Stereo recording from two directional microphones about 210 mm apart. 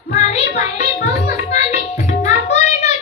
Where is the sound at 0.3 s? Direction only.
30° left (ahead or behind).